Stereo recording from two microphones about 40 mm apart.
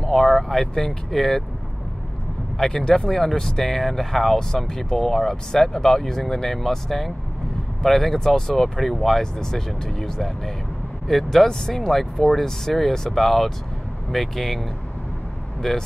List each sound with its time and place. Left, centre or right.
0.0 s speech: centre
2.6 s speech: centre
15.6 s speech: centre